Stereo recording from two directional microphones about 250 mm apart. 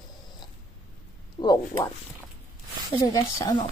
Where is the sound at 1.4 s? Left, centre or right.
Centre.